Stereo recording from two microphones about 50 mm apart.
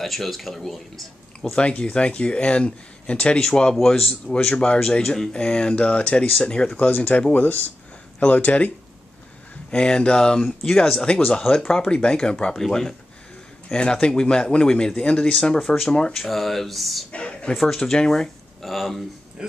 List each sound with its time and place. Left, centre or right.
0.0 s speech: centre
1.5 s speech: left
6.8 s speech: left
9.7 s speech: centre
17.1 s a sound: left
17.7 s speech: centre